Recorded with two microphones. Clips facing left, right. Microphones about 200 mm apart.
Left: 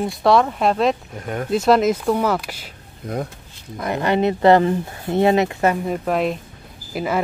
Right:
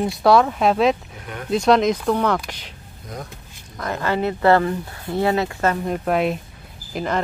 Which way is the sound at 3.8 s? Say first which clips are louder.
Left 3 dB; 20° left (ahead or behind).